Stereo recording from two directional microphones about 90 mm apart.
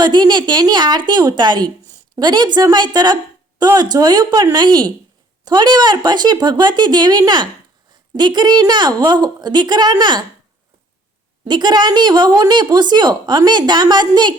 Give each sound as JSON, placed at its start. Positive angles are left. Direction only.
{"t": 0.0, "sound": "a woman's voice", "side_deg": -55}
{"t": 11.4, "sound": "a woman's voice", "side_deg": -55}